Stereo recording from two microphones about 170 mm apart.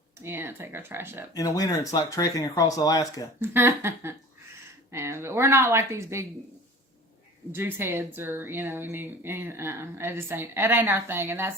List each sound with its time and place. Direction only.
0.2 s speech: 15° right (ahead or behind)
1.3 s speech: 20° left (ahead or behind)
3.4 s speech: 15° right (ahead or behind)
7.5 s speech: 15° right (ahead or behind)